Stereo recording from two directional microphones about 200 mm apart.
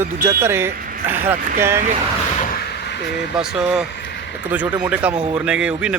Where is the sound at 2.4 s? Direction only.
45° left (ahead or behind).